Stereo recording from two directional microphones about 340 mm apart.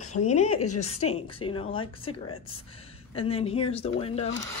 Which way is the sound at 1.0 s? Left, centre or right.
Left.